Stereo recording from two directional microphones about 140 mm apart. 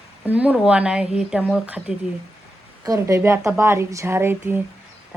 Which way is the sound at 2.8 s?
25° right (ahead or behind).